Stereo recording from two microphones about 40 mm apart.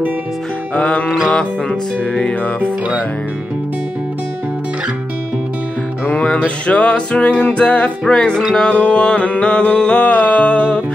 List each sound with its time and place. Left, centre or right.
0.7 s music: left
6.4 s music: left
10.0 s music: left